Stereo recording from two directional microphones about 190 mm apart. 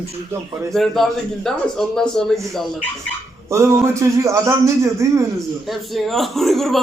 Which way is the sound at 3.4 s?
15° right (ahead or behind).